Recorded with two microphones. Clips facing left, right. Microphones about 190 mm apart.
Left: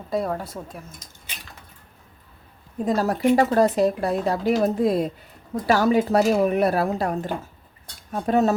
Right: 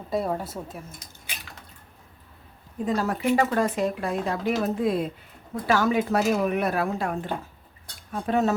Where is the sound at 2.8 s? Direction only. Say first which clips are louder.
Left 4 dB; 40° left (ahead or behind).